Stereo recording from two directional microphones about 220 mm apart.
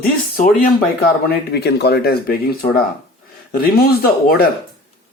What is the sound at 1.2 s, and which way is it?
Speech, 45° left (ahead or behind).